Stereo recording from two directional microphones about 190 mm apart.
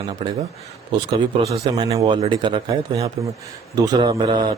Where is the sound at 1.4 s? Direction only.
30° right (ahead or behind).